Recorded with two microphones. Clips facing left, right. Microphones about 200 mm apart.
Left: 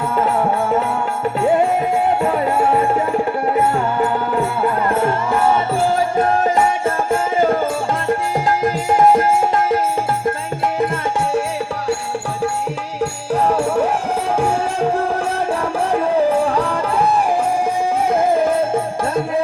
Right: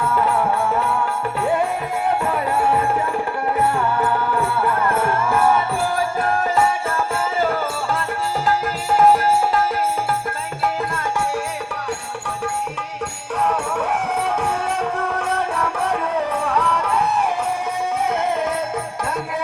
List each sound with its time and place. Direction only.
0.2 s music: 25° left (ahead or behind)
2.2 s music: 25° left (ahead or behind)
8.4 s music: 15° left (ahead or behind)
13.3 s music: 30° left (ahead or behind)